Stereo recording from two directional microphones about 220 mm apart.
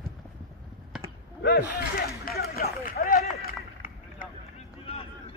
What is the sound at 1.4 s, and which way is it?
Speech, 45° left (ahead or behind).